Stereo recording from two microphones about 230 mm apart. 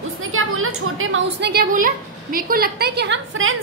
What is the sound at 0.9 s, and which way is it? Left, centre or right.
A woman's voice, right.